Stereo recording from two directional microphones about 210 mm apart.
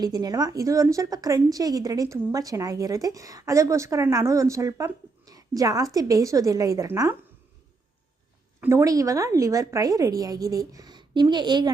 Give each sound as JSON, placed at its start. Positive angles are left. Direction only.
{"t": 0.0, "sound": "a woman's voice", "side_deg": -20}
{"t": 8.6, "sound": "a woman's voice", "side_deg": -15}